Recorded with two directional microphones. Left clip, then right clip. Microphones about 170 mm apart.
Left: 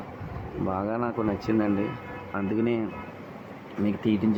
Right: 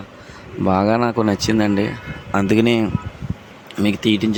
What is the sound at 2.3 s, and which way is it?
Speech, 80° right.